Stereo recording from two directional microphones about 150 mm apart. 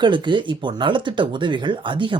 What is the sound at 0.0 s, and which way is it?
Speech, 30° right (ahead or behind).